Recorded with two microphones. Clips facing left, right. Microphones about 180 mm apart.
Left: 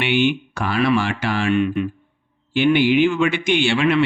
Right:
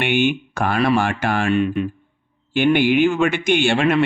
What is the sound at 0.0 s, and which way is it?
Speech, 50° right (ahead or behind).